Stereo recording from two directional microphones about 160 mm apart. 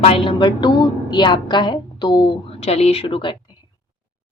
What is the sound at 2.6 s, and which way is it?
Speech, 40° left (ahead or behind).